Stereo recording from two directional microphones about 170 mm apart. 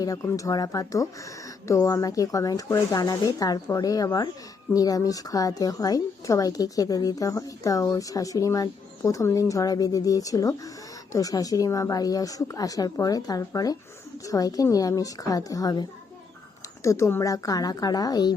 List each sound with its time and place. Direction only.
0.0 s a woman's voice: 20° left (ahead or behind)